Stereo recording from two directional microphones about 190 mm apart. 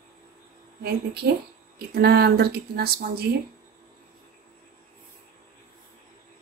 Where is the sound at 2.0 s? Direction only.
60° right (ahead or behind).